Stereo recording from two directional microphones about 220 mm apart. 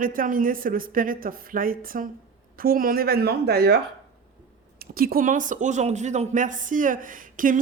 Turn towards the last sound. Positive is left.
turn(degrees=-35)  # may be behind; listen again after turning